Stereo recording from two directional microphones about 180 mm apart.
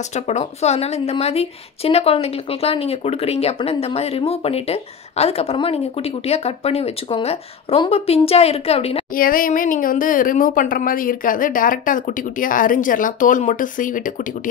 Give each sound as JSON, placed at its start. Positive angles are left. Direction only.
{"t": 0.1, "sound": "a woman's voice", "side_deg": 40}
{"t": 9.1, "sound": "speech", "side_deg": 50}